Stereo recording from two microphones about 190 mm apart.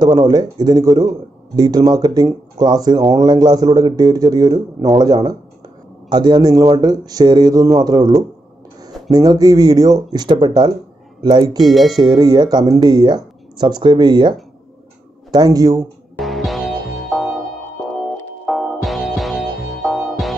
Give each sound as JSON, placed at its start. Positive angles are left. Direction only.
{"t": 0.0, "sound": "speech", "side_deg": -20}
{"t": 11.7, "sound": "speech", "side_deg": 0}
{"t": 12.0, "sound": "speech", "side_deg": -20}
{"t": 15.3, "sound": "speech", "side_deg": -20}
{"t": 16.2, "sound": "music", "side_deg": 0}
{"t": 18.4, "sound": "music", "side_deg": 0}